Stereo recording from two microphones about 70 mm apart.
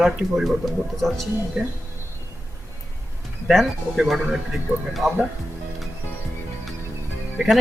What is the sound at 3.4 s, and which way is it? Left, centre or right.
Speech, centre.